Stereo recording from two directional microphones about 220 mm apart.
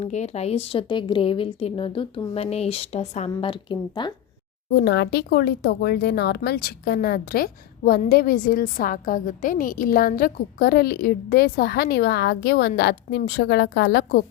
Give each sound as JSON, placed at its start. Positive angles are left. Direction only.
{"t": 0.0, "sound": "a woman's voice", "side_deg": 30}
{"t": 4.7, "sound": "speech", "side_deg": 50}